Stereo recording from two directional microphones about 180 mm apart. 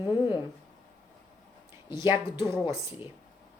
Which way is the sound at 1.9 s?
15° right (ahead or behind).